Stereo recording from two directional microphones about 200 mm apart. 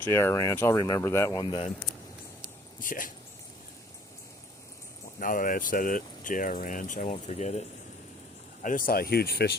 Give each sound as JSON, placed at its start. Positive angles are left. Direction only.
{"t": 0.0, "sound": "speech", "side_deg": 15}
{"t": 2.8, "sound": "speech", "side_deg": 45}
{"t": 5.2, "sound": "speech", "side_deg": 40}
{"t": 8.6, "sound": "speech", "side_deg": 45}